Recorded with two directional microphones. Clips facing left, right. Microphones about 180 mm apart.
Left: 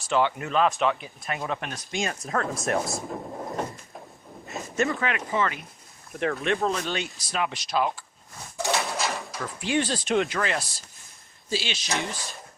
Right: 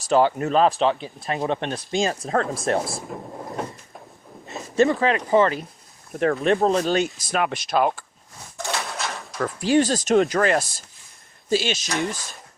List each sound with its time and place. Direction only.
0.0 s speech: 40° right (ahead or behind)
4.7 s speech: 30° right (ahead or behind); by 8.0 s 55° right (ahead or behind)
8.5 s a sound: 5° left (ahead or behind)
9.6 s speech: 40° right (ahead or behind)